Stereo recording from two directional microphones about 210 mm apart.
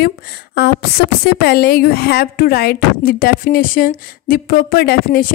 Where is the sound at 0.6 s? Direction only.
50° left (ahead or behind).